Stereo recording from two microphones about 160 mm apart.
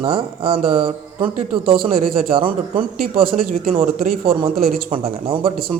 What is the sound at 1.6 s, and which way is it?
A man's voice, 65° right (ahead or behind).